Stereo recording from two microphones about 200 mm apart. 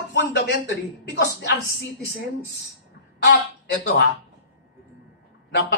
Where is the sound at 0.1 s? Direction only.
60° left (ahead or behind).